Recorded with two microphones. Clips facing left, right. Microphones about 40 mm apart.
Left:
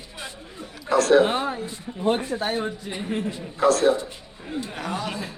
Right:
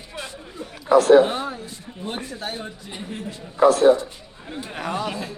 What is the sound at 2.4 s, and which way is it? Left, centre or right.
Speech, left.